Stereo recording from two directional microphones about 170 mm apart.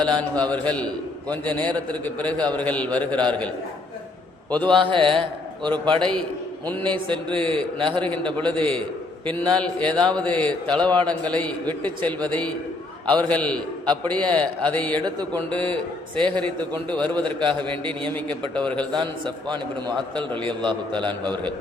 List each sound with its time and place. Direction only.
0.2 s a man's voice: 5° left (ahead or behind)
4.7 s a man's voice: 30° right (ahead or behind)
6.0 s a man's voice: 5° left (ahead or behind)
6.8 s a man's voice: 30° right (ahead or behind)
8.0 s a man's voice: 10° left (ahead or behind)
13.8 s a man's voice: 25° right (ahead or behind)
14.1 s a man's voice: 10° left (ahead or behind)
15.0 s a man's voice: 25° right (ahead or behind)
15.4 s a man's voice: 10° left (ahead or behind)
17.2 s a man's voice: 30° right (ahead or behind)
18.5 s a man's voice: 5° left (ahead or behind)
18.9 s a man's voice: 25° right (ahead or behind)